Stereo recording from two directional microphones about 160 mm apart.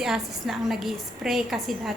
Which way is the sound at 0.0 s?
Centre (ahead or behind).